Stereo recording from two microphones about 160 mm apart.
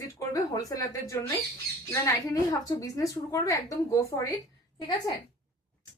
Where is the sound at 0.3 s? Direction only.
20° left (ahead or behind).